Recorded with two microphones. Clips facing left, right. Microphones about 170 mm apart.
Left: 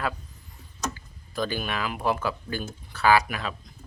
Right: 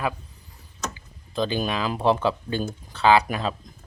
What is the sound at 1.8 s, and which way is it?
Speech, 30° right (ahead or behind).